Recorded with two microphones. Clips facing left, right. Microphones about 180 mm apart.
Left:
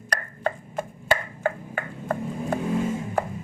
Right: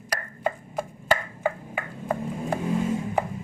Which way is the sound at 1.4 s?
5° right (ahead or behind).